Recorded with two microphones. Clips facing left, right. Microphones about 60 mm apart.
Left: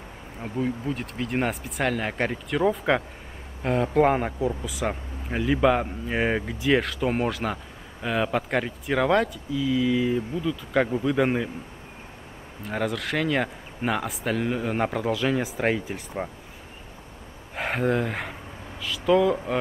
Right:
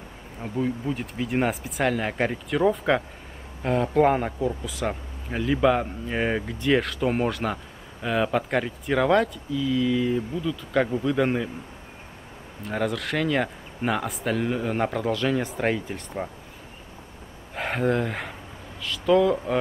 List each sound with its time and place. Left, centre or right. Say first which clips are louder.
0.4 s speech: right 1 dB; centre
12.6 s speech: right 1 dB; centre
17.6 s speech: even; centre